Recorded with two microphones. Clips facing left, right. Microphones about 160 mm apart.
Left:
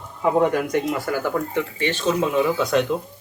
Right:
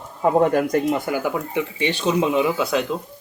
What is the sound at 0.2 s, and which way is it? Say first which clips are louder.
Speech: right 2 dB; 40° right (ahead or behind).